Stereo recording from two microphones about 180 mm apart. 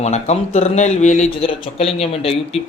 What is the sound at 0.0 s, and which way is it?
Speech, 40° left (ahead or behind).